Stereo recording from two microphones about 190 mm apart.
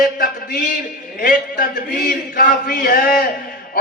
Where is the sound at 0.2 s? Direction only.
50° left (ahead or behind).